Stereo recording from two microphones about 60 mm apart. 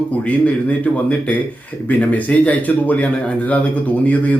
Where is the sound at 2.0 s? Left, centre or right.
Left.